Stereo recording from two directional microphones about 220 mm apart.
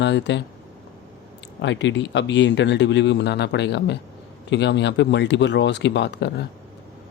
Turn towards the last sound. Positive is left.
turn(degrees=50)  # may be behind; listen again after turning